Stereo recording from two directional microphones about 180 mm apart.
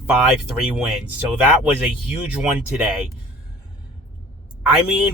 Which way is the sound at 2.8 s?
5° right (ahead or behind).